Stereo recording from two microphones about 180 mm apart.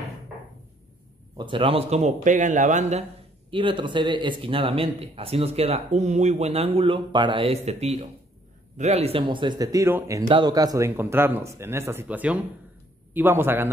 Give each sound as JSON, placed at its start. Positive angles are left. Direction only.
{"t": 1.3, "sound": "a man's voice", "side_deg": -25}